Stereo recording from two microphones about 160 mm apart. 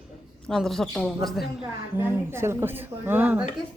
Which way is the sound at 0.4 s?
Centre (ahead or behind).